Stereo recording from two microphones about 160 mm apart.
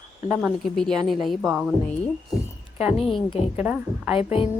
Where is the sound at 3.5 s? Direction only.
10° right (ahead or behind).